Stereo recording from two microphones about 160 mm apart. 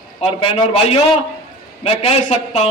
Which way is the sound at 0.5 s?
35° left (ahead or behind).